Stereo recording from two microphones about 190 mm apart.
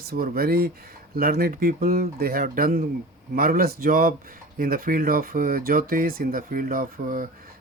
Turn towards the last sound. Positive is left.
turn(degrees=-45)  # may be behind; listen again after turning